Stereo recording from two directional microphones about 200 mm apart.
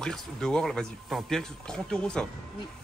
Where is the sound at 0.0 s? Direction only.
5° left (ahead or behind).